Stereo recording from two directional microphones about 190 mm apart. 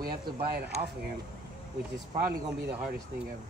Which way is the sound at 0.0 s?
55° right (ahead or behind).